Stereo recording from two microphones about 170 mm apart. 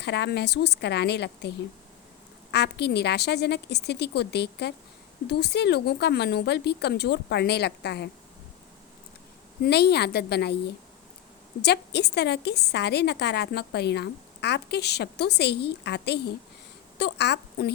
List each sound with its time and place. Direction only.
0.0 s a woman's voice: 80° left
9.6 s a woman's voice: 75° left (ahead or behind)
11.6 s a woman's voice: 75° left (ahead or behind)